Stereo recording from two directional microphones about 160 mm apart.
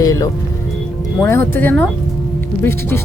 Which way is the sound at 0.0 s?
20° left (ahead or behind).